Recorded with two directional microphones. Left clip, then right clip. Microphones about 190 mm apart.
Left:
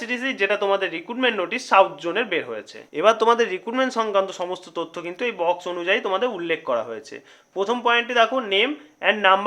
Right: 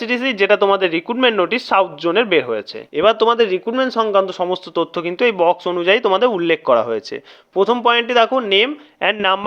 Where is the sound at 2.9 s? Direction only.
25° right (ahead or behind).